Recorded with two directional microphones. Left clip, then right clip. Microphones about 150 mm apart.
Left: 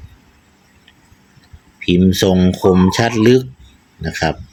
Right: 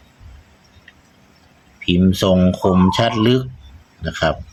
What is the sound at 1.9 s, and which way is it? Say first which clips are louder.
Speech: left 2 dB; 15° left (ahead or behind).